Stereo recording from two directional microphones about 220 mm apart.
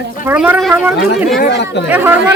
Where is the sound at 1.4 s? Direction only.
50° left (ahead or behind).